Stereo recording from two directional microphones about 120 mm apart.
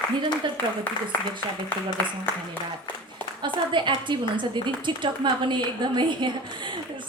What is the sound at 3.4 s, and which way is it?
A woman's voice, 40° right (ahead or behind).